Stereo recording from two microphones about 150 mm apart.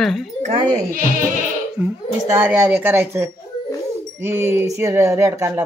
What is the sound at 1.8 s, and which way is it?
Speech, 10° right (ahead or behind).